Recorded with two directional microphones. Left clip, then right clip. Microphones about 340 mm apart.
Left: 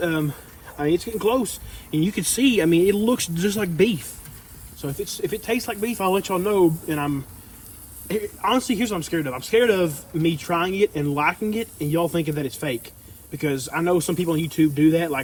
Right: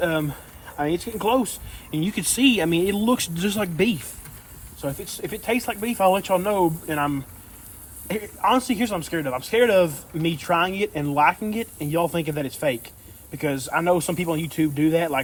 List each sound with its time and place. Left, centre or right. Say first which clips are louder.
0.8 s speech: left 3 dB; centre